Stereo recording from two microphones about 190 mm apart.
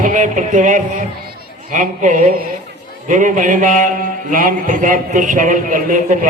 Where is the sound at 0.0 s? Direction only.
40° right (ahead or behind).